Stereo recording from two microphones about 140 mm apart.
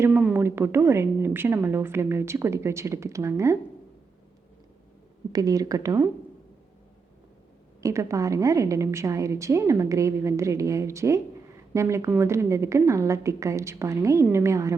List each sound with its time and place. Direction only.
0.2 s a sound: 5° right (ahead or behind)
0.4 s a woman's voice: 15° right (ahead or behind)
5.3 s a woman's voice: 25° right (ahead or behind)
7.8 s a woman's voice: 20° right (ahead or behind)